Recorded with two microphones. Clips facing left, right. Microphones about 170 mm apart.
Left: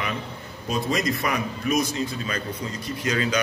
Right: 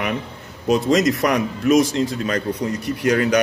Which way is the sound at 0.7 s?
80° right.